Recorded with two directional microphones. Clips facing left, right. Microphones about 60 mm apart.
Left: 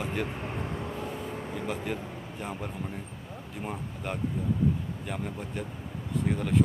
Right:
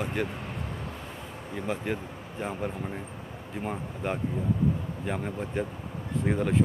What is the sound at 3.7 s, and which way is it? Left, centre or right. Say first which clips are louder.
Speech: right 4 dB; centre.